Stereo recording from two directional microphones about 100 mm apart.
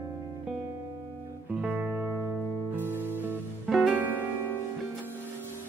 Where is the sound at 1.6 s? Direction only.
15° right (ahead or behind).